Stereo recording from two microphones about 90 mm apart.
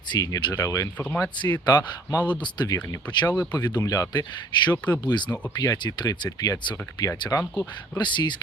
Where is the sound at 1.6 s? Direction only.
50° left (ahead or behind).